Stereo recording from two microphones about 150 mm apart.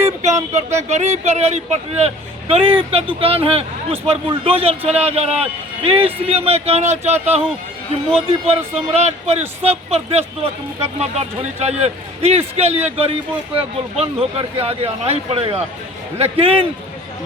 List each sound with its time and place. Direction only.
0.5 s a man's voice: 50° right (ahead or behind)